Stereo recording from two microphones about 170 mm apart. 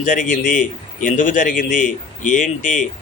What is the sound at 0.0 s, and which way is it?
A man's voice, 50° left (ahead or behind).